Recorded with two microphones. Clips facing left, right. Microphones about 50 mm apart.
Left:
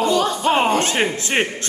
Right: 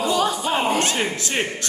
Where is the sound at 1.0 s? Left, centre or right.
Left.